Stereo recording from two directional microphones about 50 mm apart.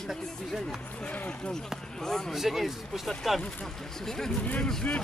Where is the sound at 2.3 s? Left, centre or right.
Centre.